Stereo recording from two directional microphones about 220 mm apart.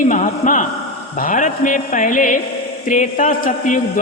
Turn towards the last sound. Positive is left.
turn(degrees=40)  # may be behind; listen again after turning